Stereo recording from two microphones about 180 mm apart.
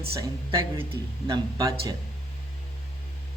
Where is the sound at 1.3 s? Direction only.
20° right (ahead or behind).